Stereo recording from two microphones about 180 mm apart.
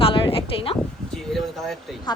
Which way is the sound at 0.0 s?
30° left (ahead or behind).